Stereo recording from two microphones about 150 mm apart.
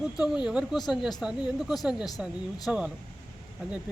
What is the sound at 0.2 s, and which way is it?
Speech, 5° right (ahead or behind).